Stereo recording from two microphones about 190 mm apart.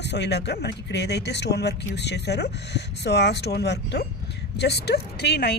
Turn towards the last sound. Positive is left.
turn(degrees=60)  # may be behind; listen again after turning